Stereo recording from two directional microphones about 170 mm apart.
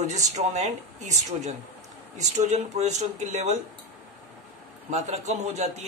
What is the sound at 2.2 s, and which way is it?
Speech, 45° right (ahead or behind).